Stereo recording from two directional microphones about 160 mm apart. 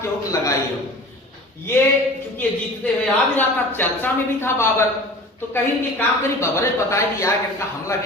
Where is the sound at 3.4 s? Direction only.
10° left (ahead or behind).